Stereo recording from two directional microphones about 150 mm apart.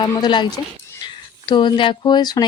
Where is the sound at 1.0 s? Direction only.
30° left (ahead or behind).